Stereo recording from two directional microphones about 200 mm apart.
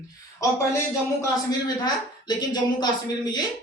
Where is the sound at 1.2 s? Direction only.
20° left (ahead or behind).